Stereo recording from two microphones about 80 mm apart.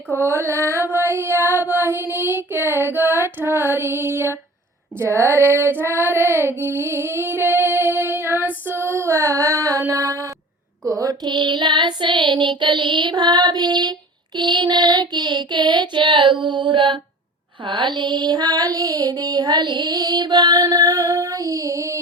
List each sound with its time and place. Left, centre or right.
0.1 s music: right
0.9 s child singing: right
4.9 s music: right
5.8 s child singing: right
9.9 s female singing: right
10.8 s child singing: right
17.7 s child singing: right
20.7 s music: right